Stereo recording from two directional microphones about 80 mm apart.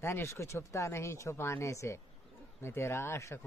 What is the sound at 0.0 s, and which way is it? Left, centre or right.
Speech, left.